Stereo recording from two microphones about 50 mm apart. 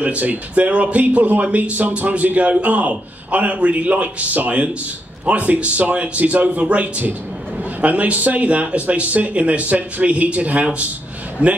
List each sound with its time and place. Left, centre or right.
0.0 s a man's voice: right